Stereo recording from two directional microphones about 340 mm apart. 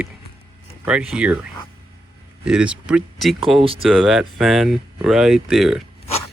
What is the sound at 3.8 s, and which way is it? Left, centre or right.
Speech, centre.